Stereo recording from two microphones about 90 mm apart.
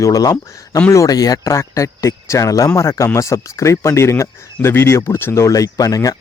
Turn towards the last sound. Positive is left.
turn(degrees=40)  # may be behind; listen again after turning